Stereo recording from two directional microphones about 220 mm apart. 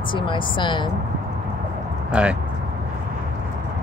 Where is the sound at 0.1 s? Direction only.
20° left (ahead or behind).